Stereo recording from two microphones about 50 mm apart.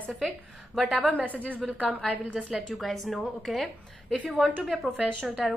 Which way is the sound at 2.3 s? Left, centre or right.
Centre.